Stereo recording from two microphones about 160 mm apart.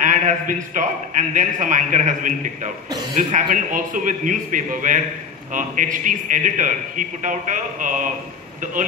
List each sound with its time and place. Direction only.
0.0 s a man's voice: 50° right (ahead or behind)